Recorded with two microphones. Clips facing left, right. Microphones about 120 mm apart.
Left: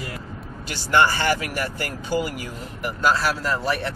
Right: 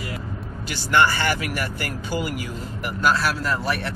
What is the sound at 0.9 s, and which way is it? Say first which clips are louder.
Speech: left 1 dB; 20° left (ahead or behind).